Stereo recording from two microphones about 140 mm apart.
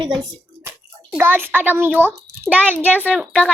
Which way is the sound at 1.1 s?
15° right (ahead or behind).